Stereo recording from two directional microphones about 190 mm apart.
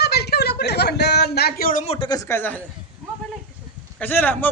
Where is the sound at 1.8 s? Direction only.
30° left (ahead or behind); by 2.6 s 10° left (ahead or behind).